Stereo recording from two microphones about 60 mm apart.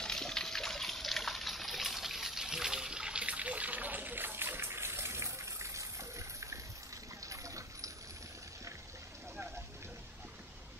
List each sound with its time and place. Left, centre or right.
0.0 s trickle: centre; by 6.6 s right
7.2 s water: right